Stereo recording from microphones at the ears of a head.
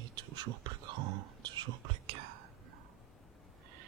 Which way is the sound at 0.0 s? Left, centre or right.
Right.